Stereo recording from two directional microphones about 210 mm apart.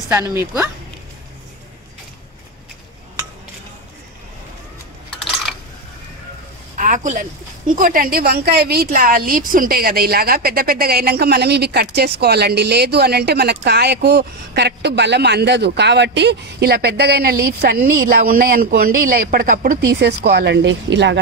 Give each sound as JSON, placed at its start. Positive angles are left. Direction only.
{"t": 0.1, "sound": "speech", "side_deg": -10}
{"t": 6.8, "sound": "speech", "side_deg": -35}